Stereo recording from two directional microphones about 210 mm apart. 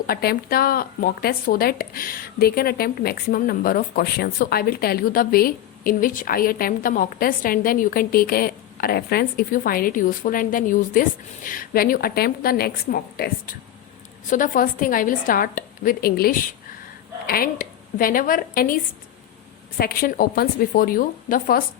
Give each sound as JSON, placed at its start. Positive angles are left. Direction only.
{"t": 0.1, "sound": "a woman's voice", "side_deg": 45}
{"t": 19.8, "sound": "speech", "side_deg": 45}